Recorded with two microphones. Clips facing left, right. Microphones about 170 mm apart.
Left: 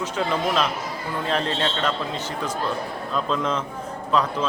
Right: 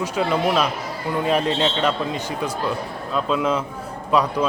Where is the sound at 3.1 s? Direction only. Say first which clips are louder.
Right 4 dB; 5° right (ahead or behind).